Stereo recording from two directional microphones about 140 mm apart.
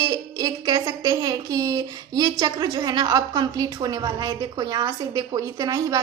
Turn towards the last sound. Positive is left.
turn(degrees=-25)  # may be behind; listen again after turning